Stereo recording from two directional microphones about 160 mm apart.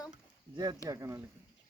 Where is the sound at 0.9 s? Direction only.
20° right (ahead or behind).